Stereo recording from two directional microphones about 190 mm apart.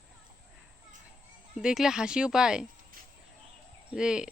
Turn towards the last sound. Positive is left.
turn(degrees=-5)  # may be behind; listen again after turning